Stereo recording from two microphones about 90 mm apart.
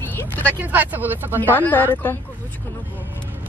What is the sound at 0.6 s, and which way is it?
Speech, 20° right (ahead or behind).